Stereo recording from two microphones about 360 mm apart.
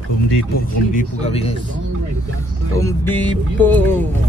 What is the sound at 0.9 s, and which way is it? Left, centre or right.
Speech, centre.